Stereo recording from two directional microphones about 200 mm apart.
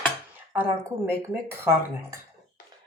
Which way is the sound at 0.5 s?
10° right (ahead or behind).